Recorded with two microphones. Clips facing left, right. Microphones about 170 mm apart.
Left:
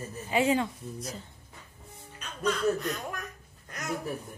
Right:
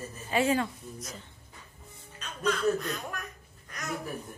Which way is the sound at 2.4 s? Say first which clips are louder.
Even; 10° left (ahead or behind).